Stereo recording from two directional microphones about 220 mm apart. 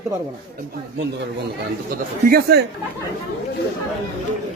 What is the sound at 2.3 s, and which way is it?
Speech, 45° right (ahead or behind).